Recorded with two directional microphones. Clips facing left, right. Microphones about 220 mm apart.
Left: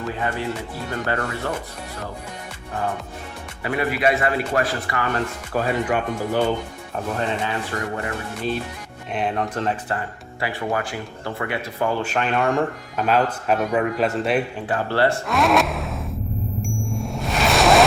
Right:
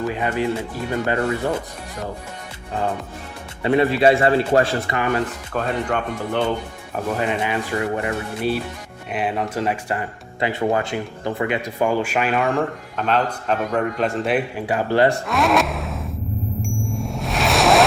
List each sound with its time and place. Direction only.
0.1 s a man's voice: 15° right (ahead or behind)
3.6 s a man's voice: 25° right (ahead or behind)
5.5 s speech: 5° left (ahead or behind)
7.2 s speech: 15° right (ahead or behind)
10.4 s speech: 20° right (ahead or behind); by 14.4 s centre (ahead or behind)
14.7 s speech: 15° right (ahead or behind)
15.3 s a sound: centre (ahead or behind)
16.6 s ding: centre (ahead or behind)